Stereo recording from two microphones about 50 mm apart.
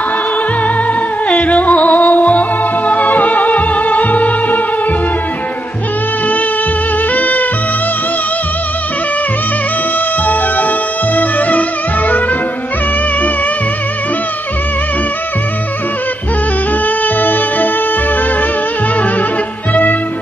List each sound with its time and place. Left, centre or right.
1.3 s music: left
7.2 s music: left
10.2 s music: left
16.8 s music: left
19.7 s music: left